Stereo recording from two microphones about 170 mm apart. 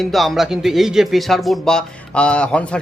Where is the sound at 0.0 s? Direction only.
Centre (ahead or behind).